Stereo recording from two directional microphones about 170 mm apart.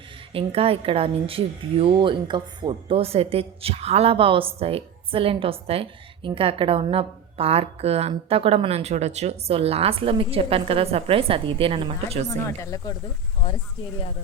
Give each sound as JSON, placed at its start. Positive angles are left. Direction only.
{"t": 0.3, "sound": "a woman's voice", "side_deg": -35}
{"t": 12.4, "sound": "speech", "side_deg": 20}